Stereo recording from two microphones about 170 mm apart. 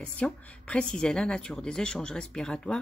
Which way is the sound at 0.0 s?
5° left (ahead or behind).